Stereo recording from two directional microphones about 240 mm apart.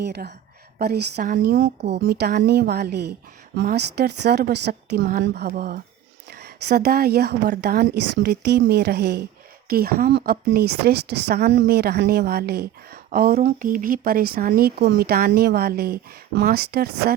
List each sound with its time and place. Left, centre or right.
0.0 s a woman's voice: right